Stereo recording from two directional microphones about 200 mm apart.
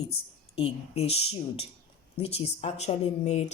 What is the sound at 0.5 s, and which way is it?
Speech, 30° left (ahead or behind).